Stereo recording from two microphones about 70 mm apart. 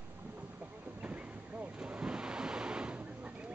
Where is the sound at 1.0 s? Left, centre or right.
Right.